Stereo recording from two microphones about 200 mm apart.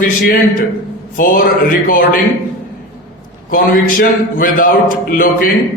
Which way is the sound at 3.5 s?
45° left (ahead or behind).